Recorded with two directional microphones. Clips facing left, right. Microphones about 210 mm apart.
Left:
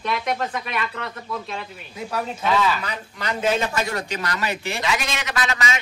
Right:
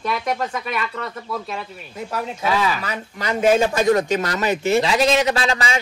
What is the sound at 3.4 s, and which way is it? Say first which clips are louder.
A man's voice: right 6 dB; 45° right (ahead or behind).